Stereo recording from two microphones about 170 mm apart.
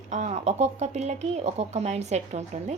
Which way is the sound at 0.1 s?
40° right (ahead or behind).